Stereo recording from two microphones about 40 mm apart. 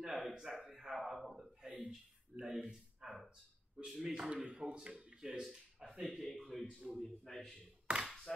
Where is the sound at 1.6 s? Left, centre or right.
Right.